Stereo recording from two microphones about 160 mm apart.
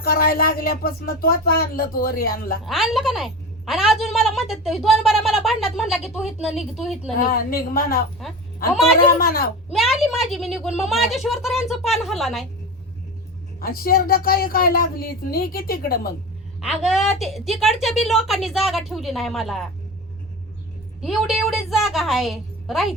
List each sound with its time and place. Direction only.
0.0 s speech: 70° left (ahead or behind)
2.6 s a woman's voice: centre (ahead or behind)
7.2 s speech: 65° left (ahead or behind)
8.7 s a woman's voice: centre (ahead or behind)
9.0 s speech: 60° left (ahead or behind)
9.7 s a woman's voice: centre (ahead or behind)
13.6 s speech: 70° left (ahead or behind)
16.6 s a woman's voice: centre (ahead or behind)
21.0 s a woman's voice: centre (ahead or behind)